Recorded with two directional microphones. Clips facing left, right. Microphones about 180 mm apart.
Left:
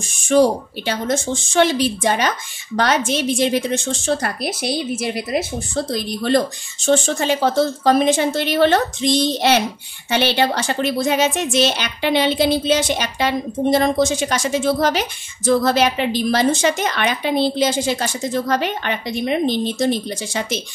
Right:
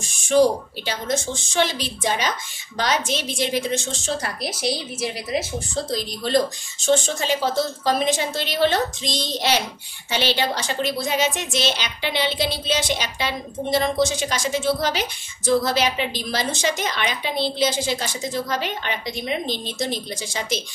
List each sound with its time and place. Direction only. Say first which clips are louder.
0.3 s a woman's voice: left 2 dB; 55° left (ahead or behind)